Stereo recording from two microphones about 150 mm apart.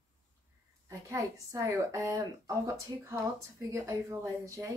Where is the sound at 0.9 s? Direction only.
20° right (ahead or behind).